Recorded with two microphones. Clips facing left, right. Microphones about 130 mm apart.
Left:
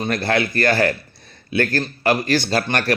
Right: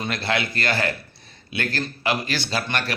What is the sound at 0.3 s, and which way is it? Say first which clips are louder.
Speech: left 6 dB; 45° left (ahead or behind).